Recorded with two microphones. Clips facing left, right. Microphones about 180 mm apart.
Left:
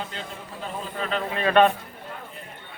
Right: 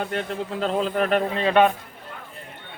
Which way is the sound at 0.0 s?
60° right (ahead or behind).